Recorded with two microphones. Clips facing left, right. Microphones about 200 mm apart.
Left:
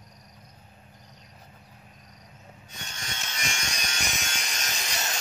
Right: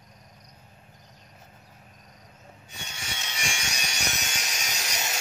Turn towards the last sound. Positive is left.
turn(degrees=-10)  # may be behind; listen again after turning